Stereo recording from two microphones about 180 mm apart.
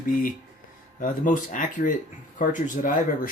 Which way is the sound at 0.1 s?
50° left (ahead or behind).